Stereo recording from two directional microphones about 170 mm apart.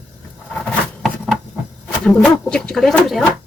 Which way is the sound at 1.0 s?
Centre (ahead or behind).